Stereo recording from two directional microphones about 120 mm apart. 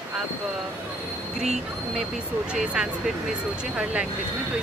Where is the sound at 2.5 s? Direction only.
10° right (ahead or behind).